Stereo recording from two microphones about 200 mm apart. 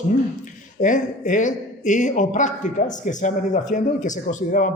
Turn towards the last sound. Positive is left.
turn(degrees=40)  # may be behind; listen again after turning